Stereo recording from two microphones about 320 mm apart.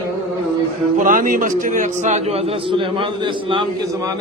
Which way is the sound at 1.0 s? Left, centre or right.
Right.